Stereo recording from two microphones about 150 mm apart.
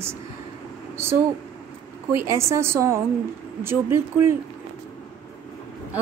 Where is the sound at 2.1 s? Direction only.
15° right (ahead or behind).